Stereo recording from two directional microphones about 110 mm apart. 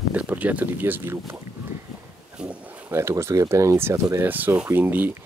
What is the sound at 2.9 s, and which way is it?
Speech, 25° right (ahead or behind).